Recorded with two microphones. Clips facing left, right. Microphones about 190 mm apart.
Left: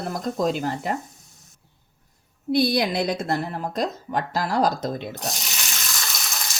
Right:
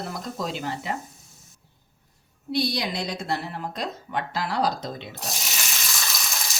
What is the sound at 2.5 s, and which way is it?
A woman's voice, 55° left (ahead or behind).